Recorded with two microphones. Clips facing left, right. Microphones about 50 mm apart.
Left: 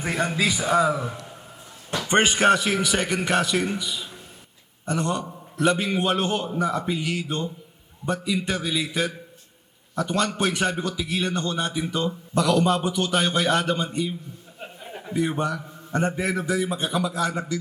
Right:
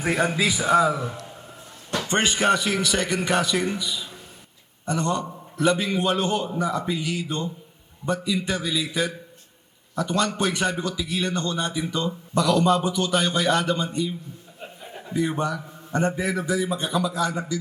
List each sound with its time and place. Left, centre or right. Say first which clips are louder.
0.0 s a man's voice: right 2 dB; centre
2.0 s speech: left 4 dB; left
2.4 s a man's voice: left 2 dB; centre